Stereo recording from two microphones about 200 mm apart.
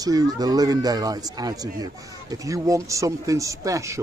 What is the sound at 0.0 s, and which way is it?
A man's voice, 20° right (ahead or behind).